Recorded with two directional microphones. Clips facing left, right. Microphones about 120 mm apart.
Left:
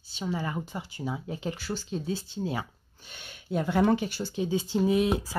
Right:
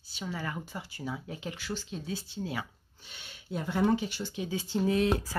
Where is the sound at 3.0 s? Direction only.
50° left (ahead or behind).